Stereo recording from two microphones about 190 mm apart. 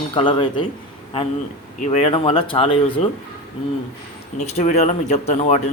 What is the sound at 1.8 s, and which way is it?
Speech, 35° left (ahead or behind).